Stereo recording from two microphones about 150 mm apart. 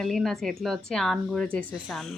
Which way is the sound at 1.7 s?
10° right (ahead or behind).